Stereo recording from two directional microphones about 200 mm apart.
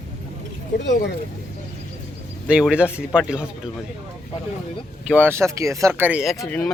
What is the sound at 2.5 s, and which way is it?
Speech, 5° right (ahead or behind).